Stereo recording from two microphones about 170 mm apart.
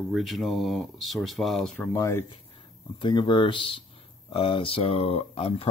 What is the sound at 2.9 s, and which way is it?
Speech, 25° left (ahead or behind).